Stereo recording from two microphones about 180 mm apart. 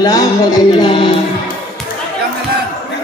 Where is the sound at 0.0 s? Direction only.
20° left (ahead or behind).